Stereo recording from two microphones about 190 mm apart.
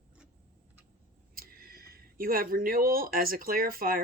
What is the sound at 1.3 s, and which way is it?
Speech, 50° right (ahead or behind).